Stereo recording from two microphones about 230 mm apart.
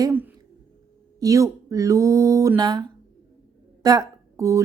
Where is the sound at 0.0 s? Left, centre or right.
Centre.